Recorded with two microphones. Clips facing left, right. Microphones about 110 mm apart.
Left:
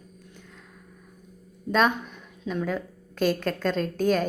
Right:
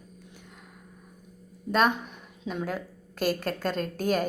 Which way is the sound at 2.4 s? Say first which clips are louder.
Left 3 dB; 15° right (ahead or behind).